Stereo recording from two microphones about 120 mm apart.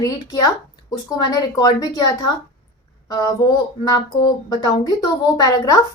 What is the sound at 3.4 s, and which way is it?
A woman's voice, 35° left (ahead or behind).